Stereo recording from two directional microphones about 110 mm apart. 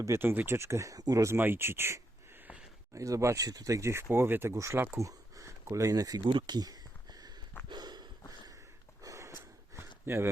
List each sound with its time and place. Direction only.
0.0 s speech: 25° right (ahead or behind)
6.2 s a sound: 45° right (ahead or behind)
9.0 s gasp: 25° right (ahead or behind)